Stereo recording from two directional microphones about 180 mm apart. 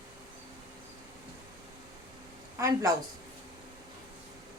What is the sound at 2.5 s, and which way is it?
Speech, 15° right (ahead or behind).